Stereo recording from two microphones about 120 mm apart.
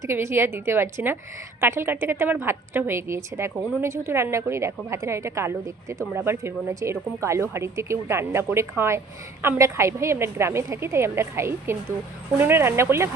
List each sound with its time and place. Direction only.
0.0 s a woman's voice: 20° right (ahead or behind)